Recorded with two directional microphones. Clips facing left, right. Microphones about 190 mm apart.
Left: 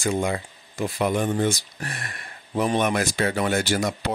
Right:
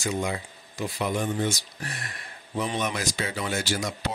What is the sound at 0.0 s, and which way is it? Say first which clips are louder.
Speech: left 4 dB; 50° left (ahead or behind).